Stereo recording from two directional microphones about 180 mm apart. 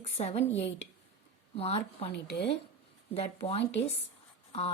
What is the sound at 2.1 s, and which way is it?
Speech, 70° left (ahead or behind).